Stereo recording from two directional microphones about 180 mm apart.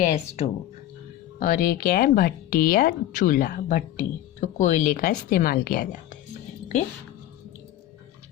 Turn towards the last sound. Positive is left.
turn(degrees=40)  # may be behind; listen again after turning